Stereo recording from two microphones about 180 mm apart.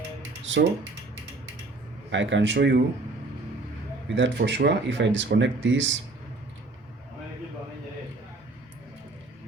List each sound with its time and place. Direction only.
0.5 s a sound: 90° right
2.0 s speech: 90° right
4.1 s speech: 75° right (ahead or behind)